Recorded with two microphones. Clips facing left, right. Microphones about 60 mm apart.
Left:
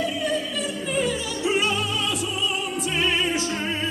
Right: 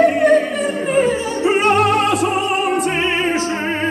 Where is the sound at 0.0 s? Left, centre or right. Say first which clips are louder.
Right 13 dB; right.